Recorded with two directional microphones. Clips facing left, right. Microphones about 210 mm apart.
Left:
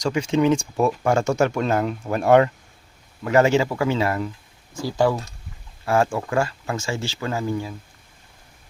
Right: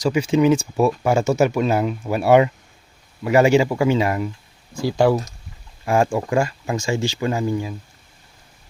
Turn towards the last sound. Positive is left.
turn(degrees=-15)  # may be behind; listen again after turning